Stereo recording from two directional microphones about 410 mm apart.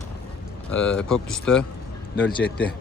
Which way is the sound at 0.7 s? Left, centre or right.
Centre.